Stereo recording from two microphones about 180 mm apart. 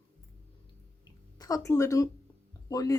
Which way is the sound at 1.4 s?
20° left (ahead or behind).